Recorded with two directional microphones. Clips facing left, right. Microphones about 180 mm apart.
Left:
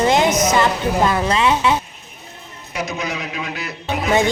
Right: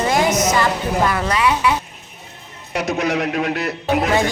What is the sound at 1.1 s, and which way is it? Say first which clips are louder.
Speech: left 1 dB; 25° left (ahead or behind).